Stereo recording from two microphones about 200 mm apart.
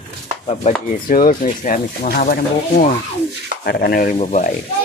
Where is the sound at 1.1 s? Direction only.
40° left (ahead or behind).